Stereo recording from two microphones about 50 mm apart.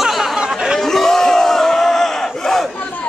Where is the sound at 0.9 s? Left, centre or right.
Centre.